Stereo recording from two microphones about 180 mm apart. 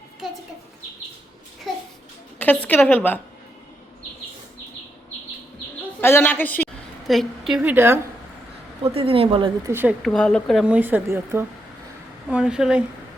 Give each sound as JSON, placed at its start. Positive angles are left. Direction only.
{"t": 0.2, "sound": "bird", "side_deg": 0}
{"t": 1.7, "sound": "a sound", "side_deg": 0}
{"t": 2.4, "sound": "a woman's voice", "side_deg": 10}
{"t": 6.0, "sound": "a woman's voice", "side_deg": 10}
{"t": 7.1, "sound": "a woman's voice", "side_deg": 0}
{"t": 8.8, "sound": "a woman's voice", "side_deg": -30}
{"t": 9.6, "sound": "speech", "side_deg": -10}
{"t": 10.0, "sound": "a woman's voice", "side_deg": 5}